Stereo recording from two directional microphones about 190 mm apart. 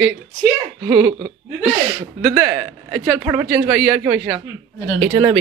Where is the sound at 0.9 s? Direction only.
20° right (ahead or behind).